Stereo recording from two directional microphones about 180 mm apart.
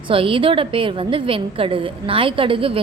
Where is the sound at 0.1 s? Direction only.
30° right (ahead or behind).